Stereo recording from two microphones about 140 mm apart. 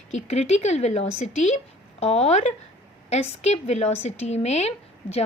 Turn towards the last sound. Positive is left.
turn(degrees=50)  # may be behind; listen again after turning